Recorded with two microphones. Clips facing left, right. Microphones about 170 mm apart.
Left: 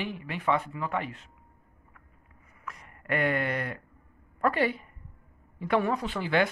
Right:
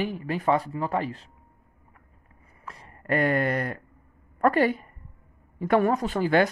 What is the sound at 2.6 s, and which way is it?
A woman's voice, 30° right (ahead or behind).